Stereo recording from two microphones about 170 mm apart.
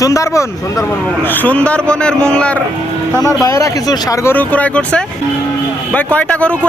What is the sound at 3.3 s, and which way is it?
A man's voice, 20° left (ahead or behind).